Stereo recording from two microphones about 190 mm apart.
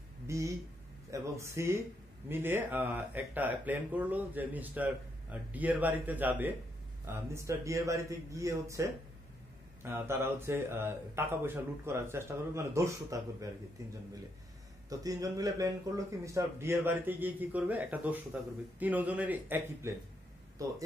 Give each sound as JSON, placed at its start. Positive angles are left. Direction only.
{"t": 0.3, "sound": "speech", "side_deg": -15}
{"t": 14.9, "sound": "speech", "side_deg": -20}